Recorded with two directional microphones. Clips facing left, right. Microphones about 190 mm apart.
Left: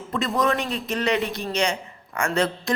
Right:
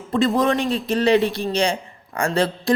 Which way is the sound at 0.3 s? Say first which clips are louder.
Right 4 dB; 30° right (ahead or behind).